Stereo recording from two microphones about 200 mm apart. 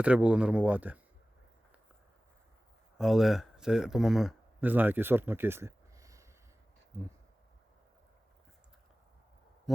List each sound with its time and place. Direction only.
0.0 s speech: 5° right (ahead or behind)
3.0 s speech: centre (ahead or behind)
9.7 s heart murmur: centre (ahead or behind)